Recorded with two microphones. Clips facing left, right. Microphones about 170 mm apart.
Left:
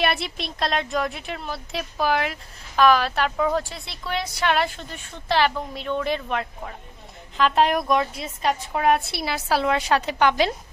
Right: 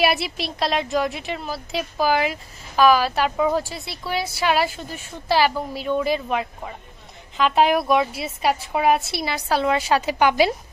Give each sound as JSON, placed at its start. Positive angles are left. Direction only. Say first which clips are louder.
{"t": 0.0, "sound": "a woman's voice", "louder": "right 3 dB", "side_deg": -5}